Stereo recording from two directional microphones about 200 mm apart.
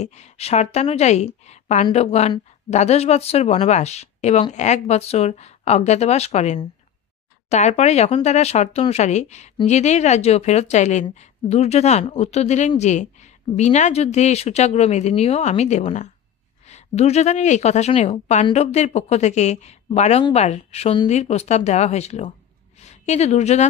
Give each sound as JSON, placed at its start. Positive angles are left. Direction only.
{"t": 0.0, "sound": "a woman's voice", "side_deg": 35}